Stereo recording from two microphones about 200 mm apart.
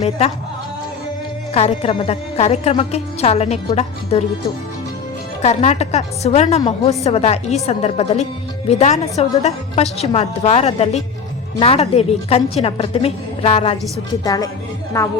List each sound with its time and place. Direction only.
1.5 s a woman's voice: 30° left (ahead or behind)
5.4 s a woman's voice: 35° left (ahead or behind)
14.3 s speech: 15° left (ahead or behind)